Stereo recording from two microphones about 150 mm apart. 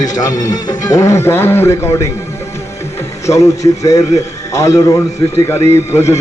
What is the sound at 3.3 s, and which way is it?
A man's voice, 20° left (ahead or behind).